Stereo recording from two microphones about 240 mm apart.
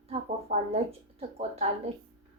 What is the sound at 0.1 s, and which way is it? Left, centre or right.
A woman's voice, right.